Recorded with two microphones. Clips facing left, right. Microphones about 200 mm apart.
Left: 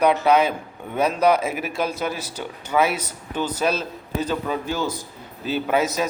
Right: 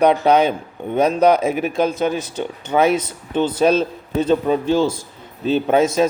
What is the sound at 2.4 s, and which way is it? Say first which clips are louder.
A man's voice: right 4 dB; 30° right (ahead or behind).